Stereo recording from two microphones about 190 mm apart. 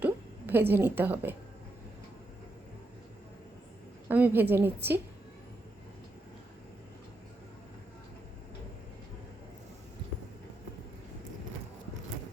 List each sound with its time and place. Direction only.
0.0 s a sound: 10° right (ahead or behind)
0.7 s a woman's voice: 10° right (ahead or behind)
4.1 s a woman's voice: 10° right (ahead or behind)